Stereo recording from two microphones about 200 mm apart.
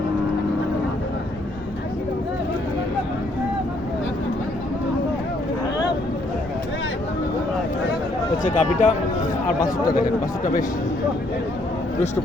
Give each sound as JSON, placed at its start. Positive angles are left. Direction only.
{"t": 8.4, "sound": "speech", "side_deg": 35}